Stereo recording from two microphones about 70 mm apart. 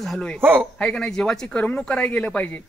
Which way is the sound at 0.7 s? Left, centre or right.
Centre.